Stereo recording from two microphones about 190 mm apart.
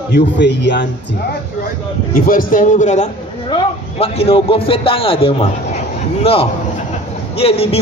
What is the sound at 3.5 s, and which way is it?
A man's voice, 30° left (ahead or behind).